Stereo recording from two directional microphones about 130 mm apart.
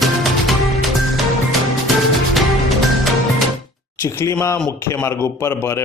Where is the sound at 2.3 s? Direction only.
Centre (ahead or behind).